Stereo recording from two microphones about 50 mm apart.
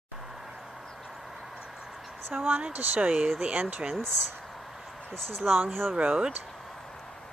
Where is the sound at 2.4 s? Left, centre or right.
Right.